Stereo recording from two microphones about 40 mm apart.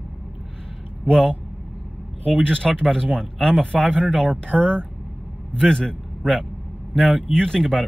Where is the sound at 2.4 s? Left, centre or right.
Left.